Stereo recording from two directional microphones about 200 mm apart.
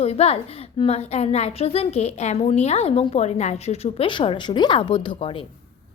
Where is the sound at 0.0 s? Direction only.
30° left (ahead or behind).